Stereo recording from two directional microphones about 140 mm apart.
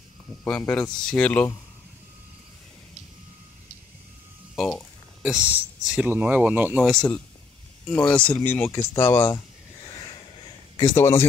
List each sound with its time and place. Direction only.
0.4 s speech: 10° left (ahead or behind)
5.2 s speech: 10° right (ahead or behind)
6.8 s speech: 5° left (ahead or behind)
10.8 s speech: 20° left (ahead or behind)